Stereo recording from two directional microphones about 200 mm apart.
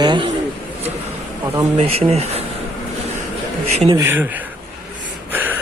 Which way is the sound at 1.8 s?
30° right (ahead or behind).